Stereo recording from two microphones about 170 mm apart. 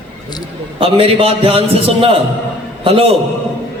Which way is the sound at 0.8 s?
30° right (ahead or behind).